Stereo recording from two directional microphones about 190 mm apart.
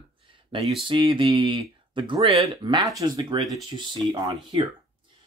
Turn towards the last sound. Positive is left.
turn(degrees=-20)  # may be behind; listen again after turning